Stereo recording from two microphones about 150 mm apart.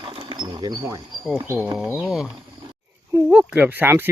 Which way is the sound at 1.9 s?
5° right (ahead or behind).